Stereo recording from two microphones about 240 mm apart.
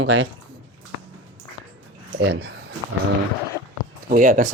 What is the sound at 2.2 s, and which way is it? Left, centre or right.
Speech, right.